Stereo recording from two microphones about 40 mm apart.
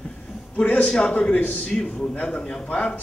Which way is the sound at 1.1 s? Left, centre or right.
Left.